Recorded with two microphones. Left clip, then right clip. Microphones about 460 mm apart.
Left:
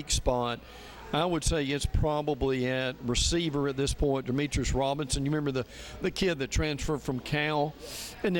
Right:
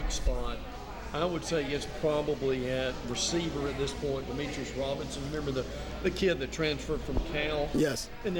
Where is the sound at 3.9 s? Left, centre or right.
Left.